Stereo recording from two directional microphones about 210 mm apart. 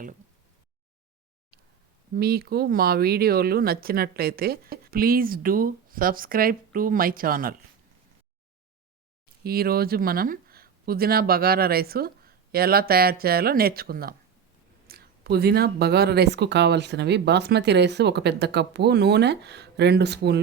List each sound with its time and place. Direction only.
2.1 s speech: 45° right (ahead or behind)
9.4 s speech: 45° right (ahead or behind)